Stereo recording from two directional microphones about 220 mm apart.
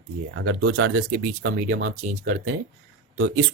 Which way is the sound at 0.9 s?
45° right (ahead or behind).